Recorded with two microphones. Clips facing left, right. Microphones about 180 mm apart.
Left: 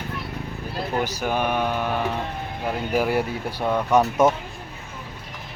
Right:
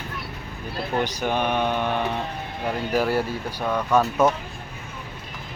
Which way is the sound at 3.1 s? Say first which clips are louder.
Left 1 dB; 20° left (ahead or behind).